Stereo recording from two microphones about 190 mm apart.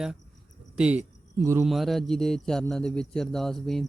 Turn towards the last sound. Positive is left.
turn(degrees=0)  # may be behind; listen again after turning